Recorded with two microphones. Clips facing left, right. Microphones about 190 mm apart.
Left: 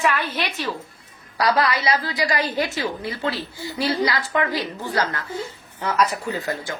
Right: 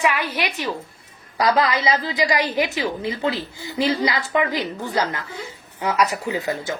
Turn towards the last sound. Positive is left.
turn(degrees=-20)  # may be behind; listen again after turning